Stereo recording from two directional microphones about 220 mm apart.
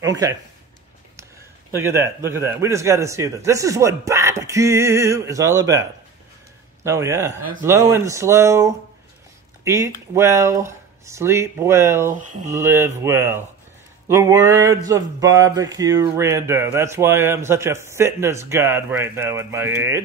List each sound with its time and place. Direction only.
0.0 s speech: 15° right (ahead or behind)
1.7 s speech: 10° right (ahead or behind)
12.1 s speech: 35° right (ahead or behind)
12.4 s speech: 15° right (ahead or behind)